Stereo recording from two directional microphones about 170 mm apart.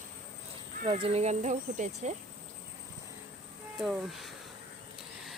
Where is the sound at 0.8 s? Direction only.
35° right (ahead or behind).